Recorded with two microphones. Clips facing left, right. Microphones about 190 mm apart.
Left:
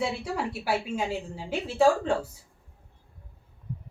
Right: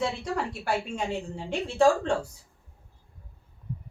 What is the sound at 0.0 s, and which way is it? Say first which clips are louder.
A woman's voice: even; 5° left (ahead or behind).